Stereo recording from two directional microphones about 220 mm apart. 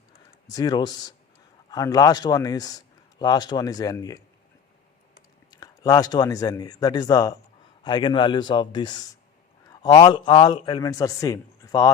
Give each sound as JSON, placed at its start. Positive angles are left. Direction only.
{"t": 0.4, "sound": "a man's voice", "side_deg": 15}
{"t": 5.5, "sound": "a man's voice", "side_deg": 15}